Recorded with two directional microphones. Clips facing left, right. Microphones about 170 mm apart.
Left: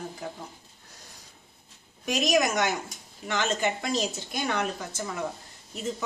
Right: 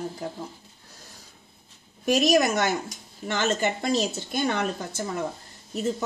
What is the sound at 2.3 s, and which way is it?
Speech, 30° right (ahead or behind).